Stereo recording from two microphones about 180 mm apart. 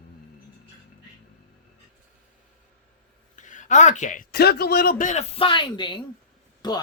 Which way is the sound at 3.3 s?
45° left (ahead or behind).